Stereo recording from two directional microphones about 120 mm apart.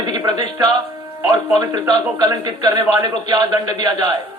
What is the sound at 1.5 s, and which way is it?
A man's voice, 35° right (ahead or behind).